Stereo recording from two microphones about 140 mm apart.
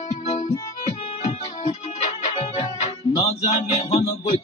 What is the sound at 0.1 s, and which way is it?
Music, 55° left (ahead or behind).